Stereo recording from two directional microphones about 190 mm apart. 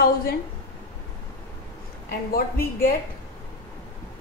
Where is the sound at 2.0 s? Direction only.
50° left (ahead or behind).